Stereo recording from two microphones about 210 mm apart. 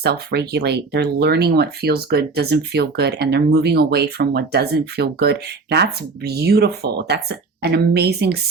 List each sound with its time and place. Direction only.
0.0 s speech: 50° right (ahead or behind)